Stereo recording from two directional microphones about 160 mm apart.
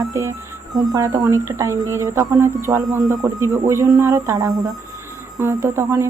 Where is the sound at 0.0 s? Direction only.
20° right (ahead or behind).